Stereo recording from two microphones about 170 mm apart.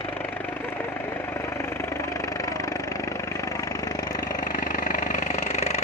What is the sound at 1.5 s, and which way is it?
Vehicle, 15° left (ahead or behind).